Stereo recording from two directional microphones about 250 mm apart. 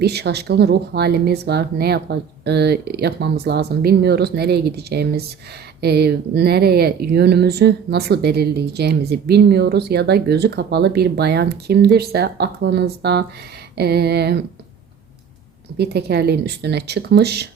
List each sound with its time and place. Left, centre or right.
0.0 s speech: right
15.8 s speech: right